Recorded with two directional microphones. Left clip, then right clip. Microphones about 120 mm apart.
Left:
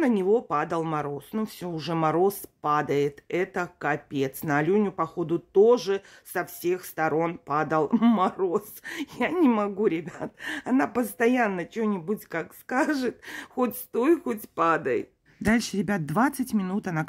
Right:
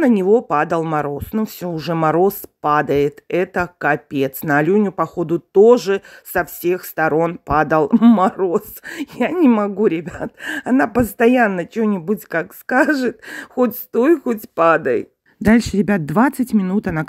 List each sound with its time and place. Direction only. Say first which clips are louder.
0.0 s speech: right 9 dB; 50° right (ahead or behind)
7.9 s speech: right 10 dB; 35° right (ahead or behind)
8.2 s speech: right 8 dB; 45° right (ahead or behind)